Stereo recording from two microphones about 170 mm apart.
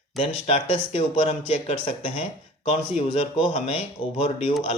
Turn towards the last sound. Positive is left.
turn(degrees=35)  # may be behind; listen again after turning